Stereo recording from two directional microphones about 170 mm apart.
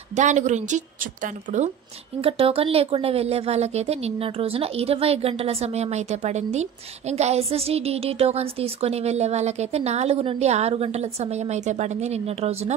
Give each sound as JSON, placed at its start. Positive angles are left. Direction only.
{"t": 0.1, "sound": "a woman's voice", "side_deg": -45}
{"t": 2.2, "sound": "a woman's voice", "side_deg": -35}